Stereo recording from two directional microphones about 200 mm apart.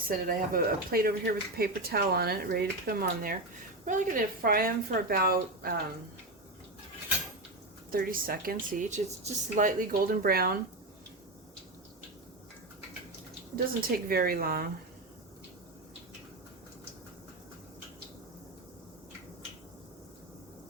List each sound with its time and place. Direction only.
0.1 s speech: 45° right (ahead or behind)
7.9 s speech: 45° right (ahead or behind)
13.9 s speech: 50° right (ahead or behind)